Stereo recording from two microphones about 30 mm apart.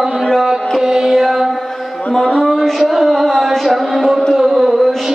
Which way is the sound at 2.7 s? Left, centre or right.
Centre.